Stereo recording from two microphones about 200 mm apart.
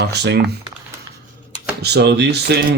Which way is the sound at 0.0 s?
55° right (ahead or behind).